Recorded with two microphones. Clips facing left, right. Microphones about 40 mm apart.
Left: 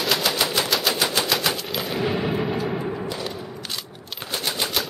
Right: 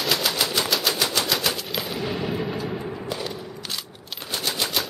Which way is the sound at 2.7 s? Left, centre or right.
Centre.